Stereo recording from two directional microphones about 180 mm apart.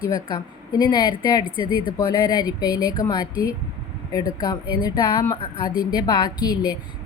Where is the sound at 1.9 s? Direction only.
20° left (ahead or behind).